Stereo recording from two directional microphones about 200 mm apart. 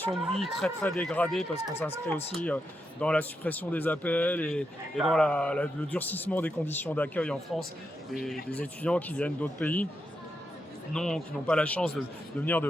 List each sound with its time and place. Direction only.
0.1 s a man's voice: centre (ahead or behind)
10.9 s a man's voice: 5° left (ahead or behind)